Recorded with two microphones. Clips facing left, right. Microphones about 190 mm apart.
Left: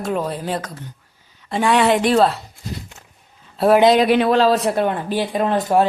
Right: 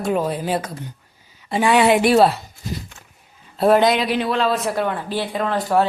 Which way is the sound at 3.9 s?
60° left (ahead or behind).